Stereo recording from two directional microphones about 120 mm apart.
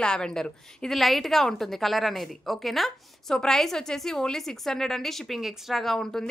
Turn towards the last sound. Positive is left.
turn(degrees=5)  # may be behind; listen again after turning